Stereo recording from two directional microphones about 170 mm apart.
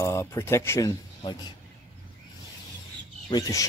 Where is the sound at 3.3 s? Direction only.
20° left (ahead or behind).